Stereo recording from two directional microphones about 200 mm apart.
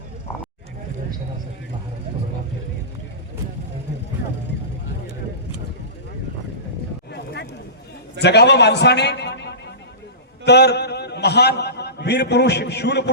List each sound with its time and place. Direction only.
8.2 s a man's voice: 55° left (ahead or behind)